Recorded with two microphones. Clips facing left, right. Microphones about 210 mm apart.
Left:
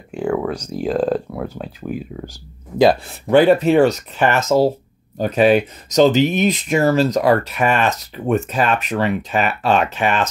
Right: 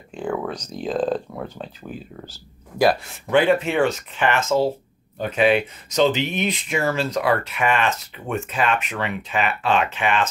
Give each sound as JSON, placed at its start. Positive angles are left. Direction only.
{"t": 0.1, "sound": "speech", "side_deg": 10}
{"t": 3.3, "sound": "speech", "side_deg": 40}